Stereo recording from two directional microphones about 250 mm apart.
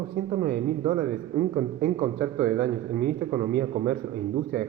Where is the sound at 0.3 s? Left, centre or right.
Right.